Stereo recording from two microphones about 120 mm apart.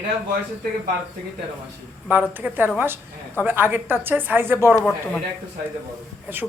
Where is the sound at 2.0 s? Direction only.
15° right (ahead or behind).